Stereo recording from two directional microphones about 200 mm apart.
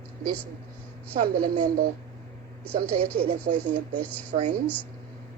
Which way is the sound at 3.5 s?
40° right (ahead or behind).